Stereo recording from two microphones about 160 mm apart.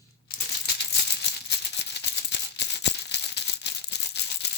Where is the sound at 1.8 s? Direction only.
90° left.